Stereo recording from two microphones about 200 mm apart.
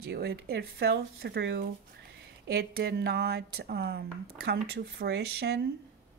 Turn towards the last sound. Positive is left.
turn(degrees=-55)  # may be behind; listen again after turning